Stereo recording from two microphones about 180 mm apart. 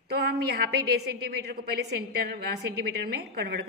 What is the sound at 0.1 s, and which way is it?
A woman's voice, 60° right (ahead or behind).